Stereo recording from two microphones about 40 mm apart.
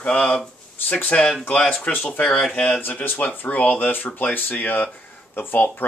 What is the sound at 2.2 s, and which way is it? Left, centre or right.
Speech, centre.